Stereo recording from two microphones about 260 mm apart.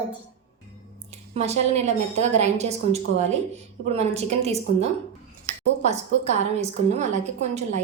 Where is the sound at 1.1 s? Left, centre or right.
Right.